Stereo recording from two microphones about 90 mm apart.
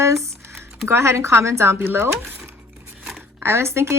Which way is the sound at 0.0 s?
30° right (ahead or behind).